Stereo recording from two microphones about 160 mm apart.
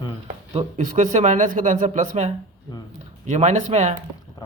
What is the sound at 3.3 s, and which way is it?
Speech, 45° right (ahead or behind).